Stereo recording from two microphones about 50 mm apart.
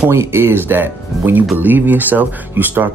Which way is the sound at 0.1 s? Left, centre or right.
Right.